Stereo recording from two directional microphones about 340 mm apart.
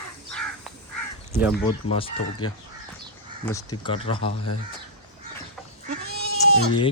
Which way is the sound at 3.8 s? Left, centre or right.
Centre.